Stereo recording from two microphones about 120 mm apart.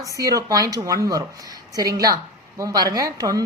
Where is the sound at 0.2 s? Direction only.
30° right (ahead or behind).